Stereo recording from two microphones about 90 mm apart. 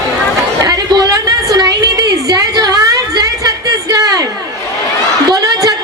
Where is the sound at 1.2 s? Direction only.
45° right (ahead or behind).